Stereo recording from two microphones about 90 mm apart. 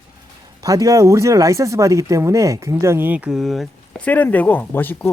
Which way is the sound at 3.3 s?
Centre (ahead or behind).